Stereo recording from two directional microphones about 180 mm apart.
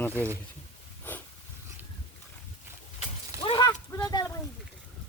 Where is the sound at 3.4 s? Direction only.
25° left (ahead or behind).